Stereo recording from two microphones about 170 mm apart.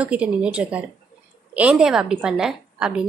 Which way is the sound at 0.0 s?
5° right (ahead or behind).